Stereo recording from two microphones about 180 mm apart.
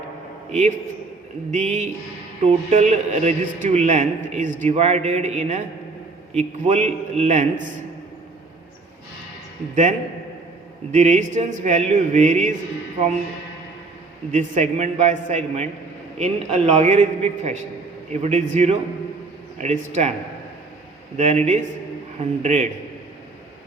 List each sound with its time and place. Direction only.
1.5 s a sound: 40° right (ahead or behind)
2.4 s a man's voice: 40° right (ahead or behind)
10.9 s a man's voice: 40° right (ahead or behind)
14.3 s a man's voice: 40° right (ahead or behind)
21.2 s a man's voice: 40° right (ahead or behind)